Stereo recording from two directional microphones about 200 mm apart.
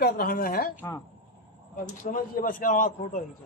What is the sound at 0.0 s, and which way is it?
Speech, 50° left (ahead or behind).